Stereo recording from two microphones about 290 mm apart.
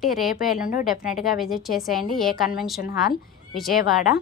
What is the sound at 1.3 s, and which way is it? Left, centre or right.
A woman's voice, centre.